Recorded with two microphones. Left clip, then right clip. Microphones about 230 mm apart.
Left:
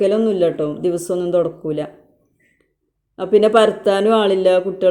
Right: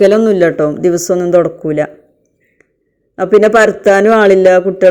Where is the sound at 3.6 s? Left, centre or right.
Right.